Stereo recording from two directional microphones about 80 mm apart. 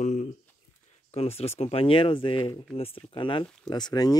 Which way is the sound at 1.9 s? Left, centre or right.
Left.